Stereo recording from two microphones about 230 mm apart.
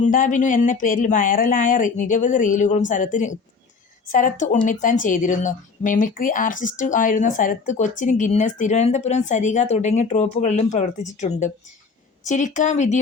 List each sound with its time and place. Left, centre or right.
0.0 s speech: left